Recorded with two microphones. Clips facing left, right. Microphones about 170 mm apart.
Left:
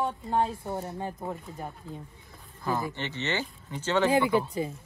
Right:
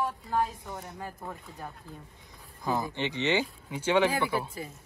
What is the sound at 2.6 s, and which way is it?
Speech, 15° right (ahead or behind).